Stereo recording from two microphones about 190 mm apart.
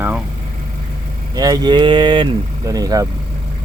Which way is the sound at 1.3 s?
20° right (ahead or behind).